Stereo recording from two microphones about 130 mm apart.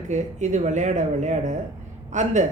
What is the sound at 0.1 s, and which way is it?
Speech, 65° right (ahead or behind).